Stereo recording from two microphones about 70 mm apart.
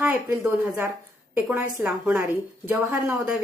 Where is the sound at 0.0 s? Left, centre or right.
Centre.